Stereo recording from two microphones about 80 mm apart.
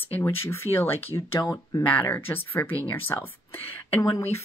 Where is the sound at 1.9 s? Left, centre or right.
Left.